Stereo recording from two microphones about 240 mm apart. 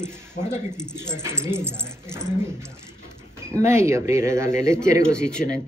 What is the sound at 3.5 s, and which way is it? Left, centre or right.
Speech, centre.